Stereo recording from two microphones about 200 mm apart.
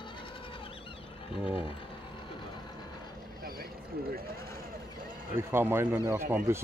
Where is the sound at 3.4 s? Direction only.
45° right (ahead or behind).